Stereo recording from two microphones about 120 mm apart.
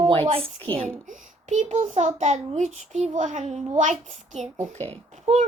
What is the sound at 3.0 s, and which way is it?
A child's voice, 90° right.